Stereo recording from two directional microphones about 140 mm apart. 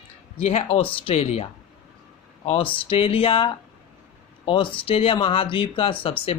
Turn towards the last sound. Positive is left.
turn(degrees=40)  # may be behind; listen again after turning